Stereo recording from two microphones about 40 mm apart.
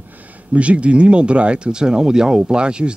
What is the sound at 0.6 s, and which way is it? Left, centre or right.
Speech, right.